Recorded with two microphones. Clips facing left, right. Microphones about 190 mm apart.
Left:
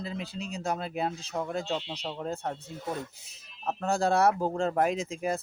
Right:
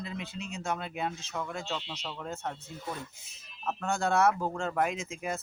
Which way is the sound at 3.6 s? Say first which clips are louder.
Left 3 dB; 35° left (ahead or behind).